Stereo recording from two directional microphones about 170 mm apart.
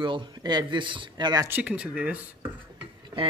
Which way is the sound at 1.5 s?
10° right (ahead or behind).